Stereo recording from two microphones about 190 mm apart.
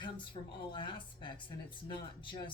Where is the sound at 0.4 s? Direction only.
30° left (ahead or behind).